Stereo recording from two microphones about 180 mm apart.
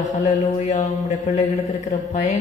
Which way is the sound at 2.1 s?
40° left (ahead or behind).